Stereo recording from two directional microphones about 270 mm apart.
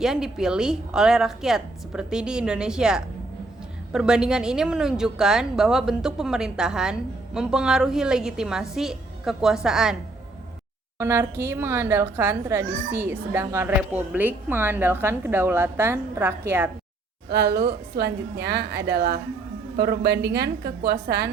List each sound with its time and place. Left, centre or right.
0.0 s a woman's voice: centre
17.2 s a woman's voice: right